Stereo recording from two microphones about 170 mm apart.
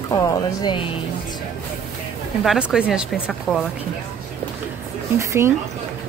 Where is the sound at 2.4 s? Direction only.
5° right (ahead or behind).